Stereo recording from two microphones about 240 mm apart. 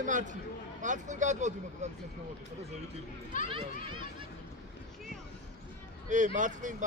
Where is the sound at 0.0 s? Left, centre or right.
Right.